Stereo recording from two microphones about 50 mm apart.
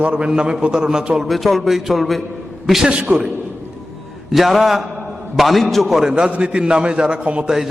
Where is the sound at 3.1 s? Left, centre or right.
Centre.